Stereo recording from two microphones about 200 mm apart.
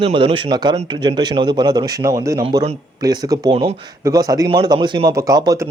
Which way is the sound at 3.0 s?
20° right (ahead or behind).